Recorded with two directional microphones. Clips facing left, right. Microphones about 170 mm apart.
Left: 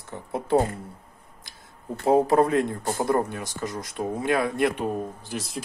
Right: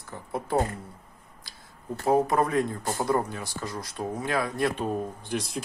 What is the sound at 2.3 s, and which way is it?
Speech, 30° left (ahead or behind).